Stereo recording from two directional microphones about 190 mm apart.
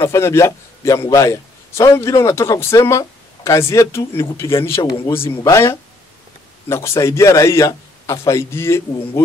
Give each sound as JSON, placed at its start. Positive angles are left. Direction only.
{"t": 0.0, "sound": "a man's voice", "side_deg": 15}
{"t": 4.9, "sound": "speech", "side_deg": 30}
{"t": 5.5, "sound": "a man's voice", "side_deg": 15}